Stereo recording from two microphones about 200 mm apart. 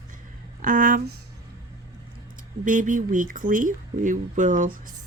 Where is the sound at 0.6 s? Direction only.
45° right (ahead or behind).